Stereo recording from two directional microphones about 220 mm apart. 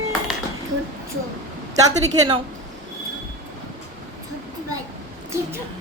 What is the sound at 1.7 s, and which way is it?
Speech, 15° right (ahead or behind).